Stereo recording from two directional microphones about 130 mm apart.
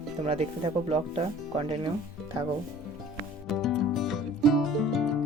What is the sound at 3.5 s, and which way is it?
Music, centre (ahead or behind).